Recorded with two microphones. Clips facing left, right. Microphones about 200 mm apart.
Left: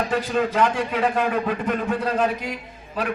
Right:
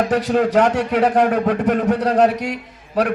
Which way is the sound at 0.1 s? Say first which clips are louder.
Right 6 dB; 70° right (ahead or behind).